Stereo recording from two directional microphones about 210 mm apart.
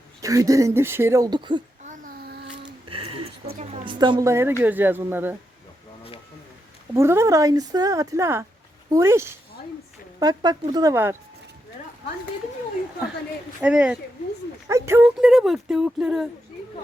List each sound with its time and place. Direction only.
0.2 s a woman's voice: 15° right (ahead or behind)
1.8 s a sound: 40° right (ahead or behind)
2.9 s a sound: 25° right (ahead or behind)
3.6 s a woman's voice: 25° right (ahead or behind); by 5.4 s 10° right (ahead or behind)
6.9 s a woman's voice: 15° right (ahead or behind)
13.6 s speech: 5° right (ahead or behind)